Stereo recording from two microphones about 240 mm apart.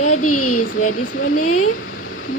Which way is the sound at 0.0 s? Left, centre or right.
Left.